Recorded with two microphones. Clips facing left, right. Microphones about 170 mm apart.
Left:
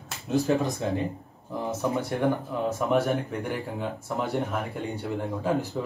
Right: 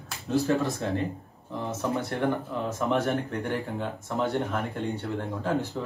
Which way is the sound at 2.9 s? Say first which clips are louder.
Left 1 dB; centre (ahead or behind).